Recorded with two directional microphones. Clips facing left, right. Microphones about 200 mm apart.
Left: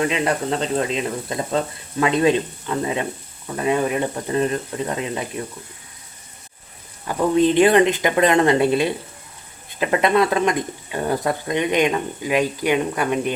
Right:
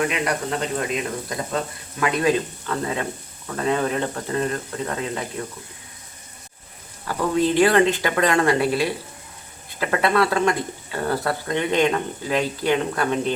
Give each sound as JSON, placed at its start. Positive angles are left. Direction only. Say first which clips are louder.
{"t": 0.0, "sound": "speech", "louder": "left 3 dB", "side_deg": 25}
{"t": 7.1, "sound": "speech", "louder": "left 4 dB", "side_deg": 20}